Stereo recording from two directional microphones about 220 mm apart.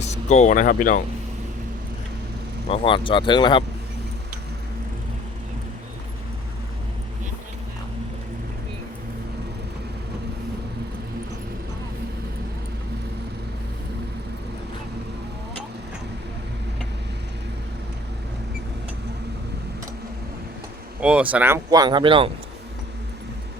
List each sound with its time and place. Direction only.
0.0 s speech: 30° left (ahead or behind)
2.6 s speech: 25° left (ahead or behind)
21.0 s speech: 5° right (ahead or behind); by 22.3 s 25° right (ahead or behind)